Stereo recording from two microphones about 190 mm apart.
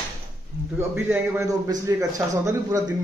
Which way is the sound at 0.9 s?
10° right (ahead or behind).